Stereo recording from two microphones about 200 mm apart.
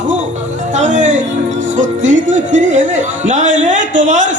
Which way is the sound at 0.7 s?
35° right (ahead or behind).